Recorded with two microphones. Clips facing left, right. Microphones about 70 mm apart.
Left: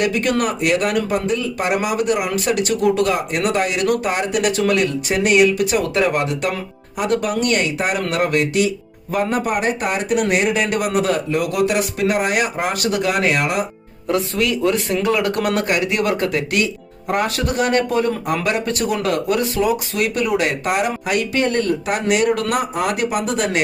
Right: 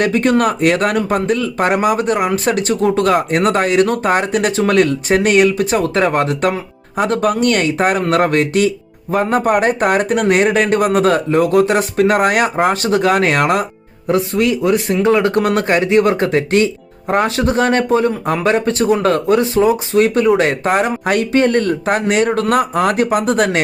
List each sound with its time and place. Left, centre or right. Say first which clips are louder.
0.0 s speech: right 5 dB; right
14.1 s speech: right 4 dB; right